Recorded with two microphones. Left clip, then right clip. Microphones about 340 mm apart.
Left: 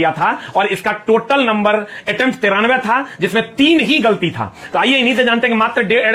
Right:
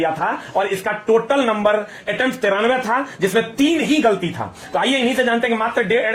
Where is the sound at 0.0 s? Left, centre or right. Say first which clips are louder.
Left 5 dB; left.